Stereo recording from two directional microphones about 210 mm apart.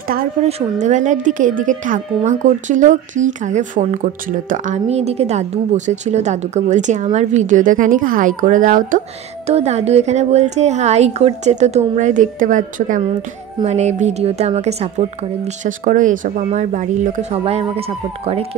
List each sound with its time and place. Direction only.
0.5 s speech: 30° right (ahead or behind)